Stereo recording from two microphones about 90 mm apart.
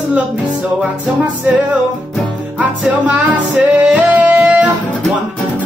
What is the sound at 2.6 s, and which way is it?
Music, 15° right (ahead or behind).